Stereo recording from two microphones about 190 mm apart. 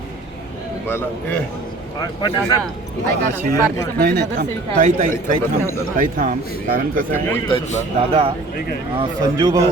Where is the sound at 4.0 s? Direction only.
55° right (ahead or behind).